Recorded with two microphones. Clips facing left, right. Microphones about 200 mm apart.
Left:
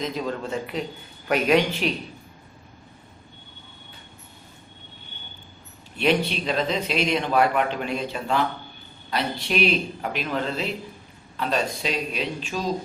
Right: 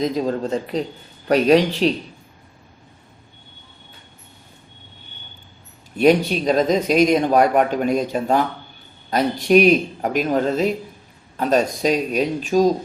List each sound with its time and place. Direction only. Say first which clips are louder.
0.0 s speech: right 7 dB; 35° right (ahead or behind)
6.0 s speech: right 7 dB; 45° right (ahead or behind)